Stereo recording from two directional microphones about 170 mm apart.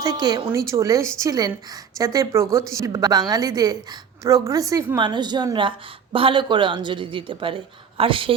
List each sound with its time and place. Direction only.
0.0 s speech: 25° right (ahead or behind)